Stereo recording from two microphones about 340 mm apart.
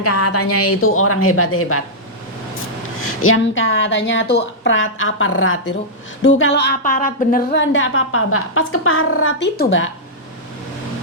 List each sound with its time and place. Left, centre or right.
0.0 s a woman's voice: left
3.0 s a woman's voice: left